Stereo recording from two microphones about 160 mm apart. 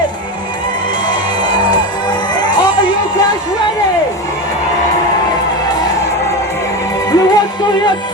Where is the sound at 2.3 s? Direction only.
25° left (ahead or behind).